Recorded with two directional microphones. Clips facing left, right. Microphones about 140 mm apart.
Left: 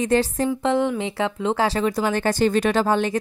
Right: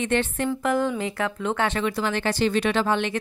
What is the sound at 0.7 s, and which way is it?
Speech, 25° left (ahead or behind).